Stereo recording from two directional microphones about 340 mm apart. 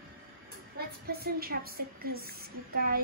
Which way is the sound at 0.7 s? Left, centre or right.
Right.